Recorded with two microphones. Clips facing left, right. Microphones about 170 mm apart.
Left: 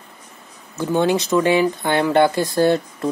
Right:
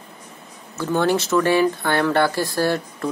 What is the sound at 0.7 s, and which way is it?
Speech, 15° left (ahead or behind).